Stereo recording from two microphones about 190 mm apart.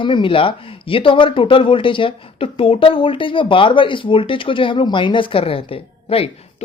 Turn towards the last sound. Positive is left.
turn(degrees=30)  # may be behind; listen again after turning